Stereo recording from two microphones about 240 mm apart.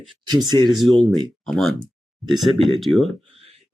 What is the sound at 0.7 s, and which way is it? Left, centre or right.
Speech, centre.